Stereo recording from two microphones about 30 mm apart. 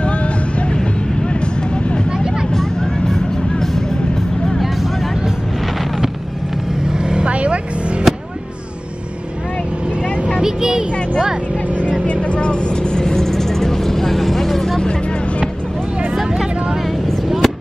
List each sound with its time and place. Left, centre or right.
0.0 s vehicle: left
2.0 s vehicle: right
3.1 s vehicle: centre
6.9 s vehicle: right
7.2 s vehicle: right
8.1 s a sound: centre
10.4 s a sound: centre
11.7 s vehicle: left; by 14.8 s centre
17.4 s fireworks: centre